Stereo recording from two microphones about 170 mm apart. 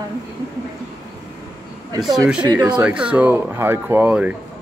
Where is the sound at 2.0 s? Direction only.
5° right (ahead or behind).